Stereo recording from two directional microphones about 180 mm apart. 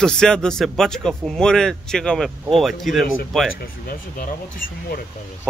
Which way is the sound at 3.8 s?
50° left (ahead or behind).